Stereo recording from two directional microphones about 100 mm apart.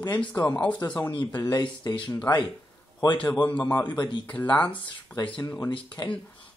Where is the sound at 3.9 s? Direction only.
50° left (ahead or behind).